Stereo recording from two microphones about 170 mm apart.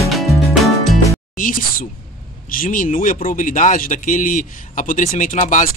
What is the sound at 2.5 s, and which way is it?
Speech, 55° left (ahead or behind).